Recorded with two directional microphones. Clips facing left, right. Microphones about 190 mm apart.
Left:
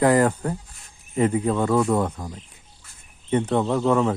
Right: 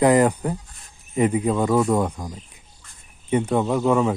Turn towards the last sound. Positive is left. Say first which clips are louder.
# right 1 dB
turn(degrees=-10)  # may be behind; listen again after turning